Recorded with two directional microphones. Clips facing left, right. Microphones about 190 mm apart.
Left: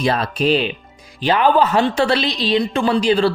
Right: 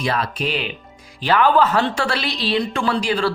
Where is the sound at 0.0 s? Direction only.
25° left (ahead or behind).